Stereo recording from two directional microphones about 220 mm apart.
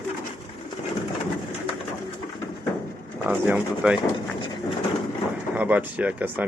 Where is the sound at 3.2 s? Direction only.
5° right (ahead or behind).